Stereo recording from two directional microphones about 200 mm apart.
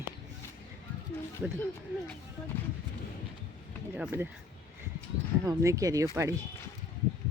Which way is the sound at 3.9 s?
5° right (ahead or behind).